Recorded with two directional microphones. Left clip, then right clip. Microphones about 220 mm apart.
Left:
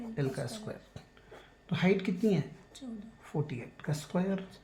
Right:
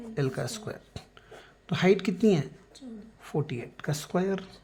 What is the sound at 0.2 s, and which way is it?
Speech, 50° right (ahead or behind).